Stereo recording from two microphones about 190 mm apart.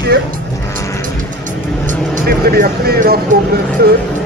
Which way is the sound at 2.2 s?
55° right (ahead or behind).